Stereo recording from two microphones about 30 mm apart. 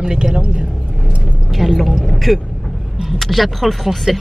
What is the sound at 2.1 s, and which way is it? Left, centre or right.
Speech, centre.